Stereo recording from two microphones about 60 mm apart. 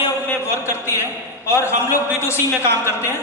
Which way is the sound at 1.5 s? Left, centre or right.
Left.